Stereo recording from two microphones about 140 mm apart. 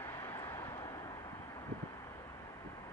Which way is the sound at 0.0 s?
20° left (ahead or behind).